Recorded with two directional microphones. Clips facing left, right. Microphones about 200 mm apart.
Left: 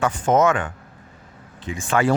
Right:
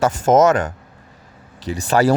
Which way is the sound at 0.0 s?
40° right (ahead or behind).